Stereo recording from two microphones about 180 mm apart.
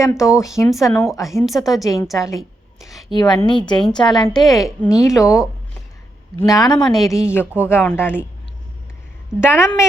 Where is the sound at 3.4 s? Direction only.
25° left (ahead or behind).